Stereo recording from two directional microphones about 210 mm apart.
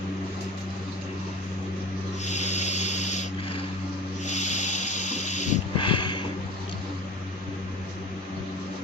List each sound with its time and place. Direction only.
2.2 s a sound: 35° left (ahead or behind)
4.3 s rub: 35° left (ahead or behind)
5.4 s snort: 30° left (ahead or behind)